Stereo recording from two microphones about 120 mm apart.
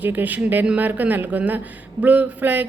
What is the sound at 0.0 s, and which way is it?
Speech, 15° right (ahead or behind).